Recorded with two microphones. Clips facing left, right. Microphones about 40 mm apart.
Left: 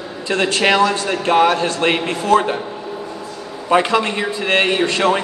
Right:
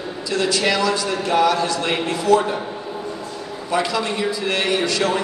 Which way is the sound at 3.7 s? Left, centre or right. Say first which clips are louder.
Left 6 dB; left.